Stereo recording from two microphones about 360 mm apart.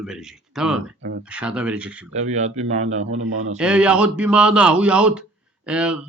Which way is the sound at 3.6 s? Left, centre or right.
Centre.